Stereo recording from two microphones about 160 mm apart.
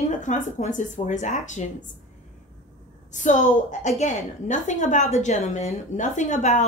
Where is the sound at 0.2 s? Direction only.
50° left (ahead or behind).